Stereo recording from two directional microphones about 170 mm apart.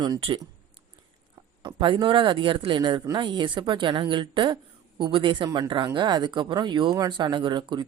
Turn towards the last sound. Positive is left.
turn(degrees=-25)  # may be behind; listen again after turning